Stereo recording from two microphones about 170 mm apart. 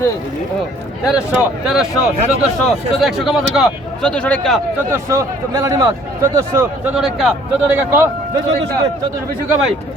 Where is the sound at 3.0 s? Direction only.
Centre (ahead or behind).